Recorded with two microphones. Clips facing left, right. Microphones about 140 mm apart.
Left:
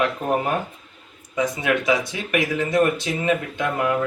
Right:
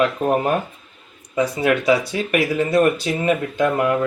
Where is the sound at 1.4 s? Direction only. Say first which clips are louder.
Right 3 dB; 30° right (ahead or behind).